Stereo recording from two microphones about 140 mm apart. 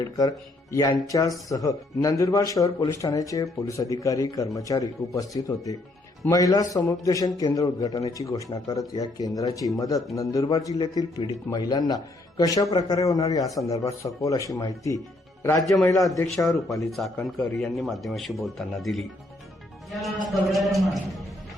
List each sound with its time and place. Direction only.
0.0 s speech: 30° left (ahead or behind)
16.9 s speech: centre (ahead or behind)